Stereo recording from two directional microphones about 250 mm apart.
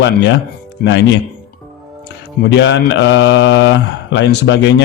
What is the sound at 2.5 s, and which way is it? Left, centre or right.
A man's voice, left.